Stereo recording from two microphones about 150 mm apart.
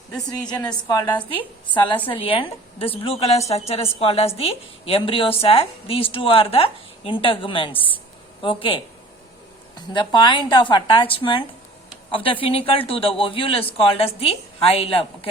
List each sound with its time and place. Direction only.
0.7 s a woman's voice: 25° left (ahead or behind)